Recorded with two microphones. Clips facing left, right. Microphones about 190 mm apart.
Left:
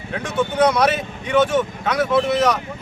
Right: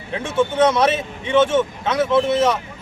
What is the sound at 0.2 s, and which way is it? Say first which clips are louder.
A man's voice: right 1 dB; 25° right (ahead or behind).